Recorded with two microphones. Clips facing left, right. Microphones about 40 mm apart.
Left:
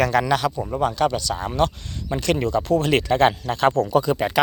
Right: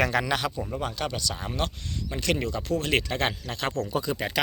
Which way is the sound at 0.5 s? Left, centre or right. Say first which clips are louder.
Left 6 dB; centre.